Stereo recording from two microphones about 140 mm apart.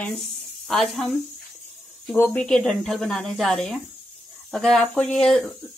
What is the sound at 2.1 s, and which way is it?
Speech, 15° left (ahead or behind).